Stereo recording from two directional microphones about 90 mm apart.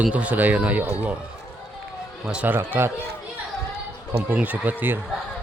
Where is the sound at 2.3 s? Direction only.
10° right (ahead or behind).